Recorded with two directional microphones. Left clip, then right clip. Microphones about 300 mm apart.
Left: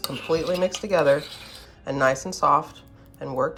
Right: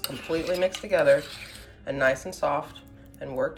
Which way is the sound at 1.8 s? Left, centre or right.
Centre.